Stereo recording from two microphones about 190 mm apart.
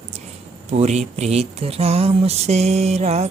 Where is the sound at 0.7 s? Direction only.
35° right (ahead or behind).